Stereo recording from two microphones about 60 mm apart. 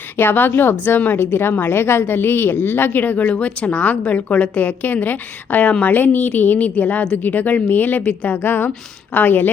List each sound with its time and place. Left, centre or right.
0.2 s a woman's voice: left